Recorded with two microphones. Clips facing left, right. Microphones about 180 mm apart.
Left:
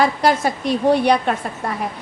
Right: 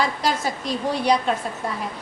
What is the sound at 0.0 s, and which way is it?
A woman's voice, 60° left (ahead or behind).